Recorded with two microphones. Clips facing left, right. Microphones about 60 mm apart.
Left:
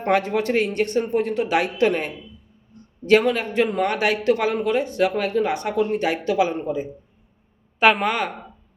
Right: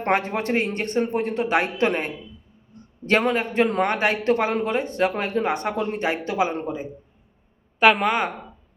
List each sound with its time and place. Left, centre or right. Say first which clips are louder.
0.0 s speech: left 2 dB; right
6.5 s a man's voice: left 3 dB; right
7.8 s a woman's voice: even; centre